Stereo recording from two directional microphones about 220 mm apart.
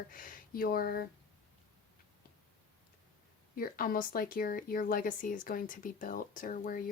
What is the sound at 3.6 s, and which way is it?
Speech, 40° left (ahead or behind).